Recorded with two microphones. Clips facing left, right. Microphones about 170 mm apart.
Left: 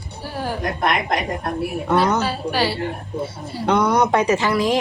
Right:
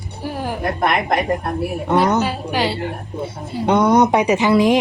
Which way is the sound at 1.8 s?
20° right (ahead or behind).